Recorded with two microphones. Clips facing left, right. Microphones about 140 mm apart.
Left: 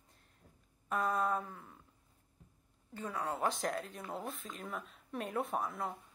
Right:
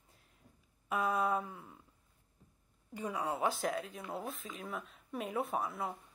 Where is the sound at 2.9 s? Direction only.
10° right (ahead or behind).